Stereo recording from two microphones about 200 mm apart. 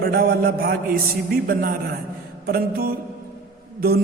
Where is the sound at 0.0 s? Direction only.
50° right (ahead or behind).